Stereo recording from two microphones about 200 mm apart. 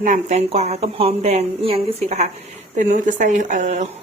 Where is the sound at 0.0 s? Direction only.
35° right (ahead or behind).